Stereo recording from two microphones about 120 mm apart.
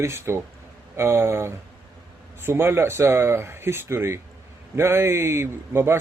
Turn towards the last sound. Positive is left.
turn(degrees=-20)  # may be behind; listen again after turning